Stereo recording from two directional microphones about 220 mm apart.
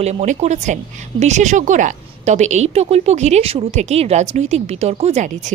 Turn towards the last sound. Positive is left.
turn(degrees=-35)  # may be behind; listen again after turning